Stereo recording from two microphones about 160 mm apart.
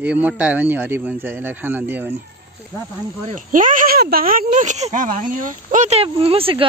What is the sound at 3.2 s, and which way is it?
Speech, 55° right (ahead or behind).